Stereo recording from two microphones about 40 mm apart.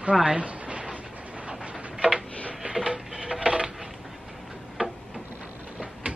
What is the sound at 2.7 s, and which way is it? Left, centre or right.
Printer, right.